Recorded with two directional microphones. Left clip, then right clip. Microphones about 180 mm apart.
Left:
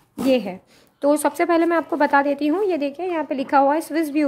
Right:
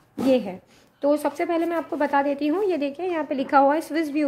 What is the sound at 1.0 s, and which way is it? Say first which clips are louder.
Speech: left 4 dB; 35° left (ahead or behind).